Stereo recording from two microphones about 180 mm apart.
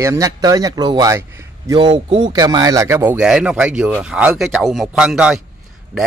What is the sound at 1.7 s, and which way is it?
A man's voice, 30° right (ahead or behind).